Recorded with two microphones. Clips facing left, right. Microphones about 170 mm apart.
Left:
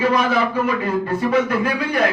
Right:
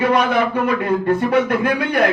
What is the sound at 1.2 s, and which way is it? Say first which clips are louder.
Speech: right 2 dB; 65° right (ahead or behind).